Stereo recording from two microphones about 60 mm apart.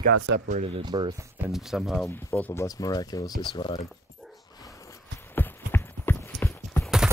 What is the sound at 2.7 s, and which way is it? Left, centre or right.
Speech, left.